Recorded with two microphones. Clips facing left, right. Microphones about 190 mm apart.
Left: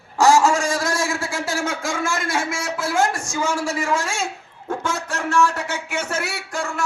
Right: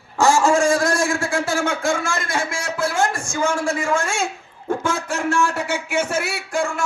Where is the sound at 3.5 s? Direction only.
55° right (ahead or behind).